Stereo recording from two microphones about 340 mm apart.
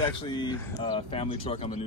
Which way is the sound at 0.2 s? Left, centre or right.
Centre.